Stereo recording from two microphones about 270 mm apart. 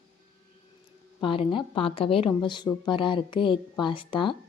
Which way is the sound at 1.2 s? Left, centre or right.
Centre.